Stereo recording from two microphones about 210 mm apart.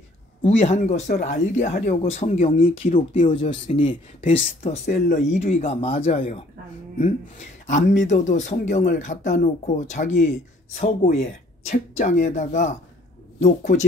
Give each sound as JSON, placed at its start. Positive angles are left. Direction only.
{"t": 0.4, "sound": "speech", "side_deg": 30}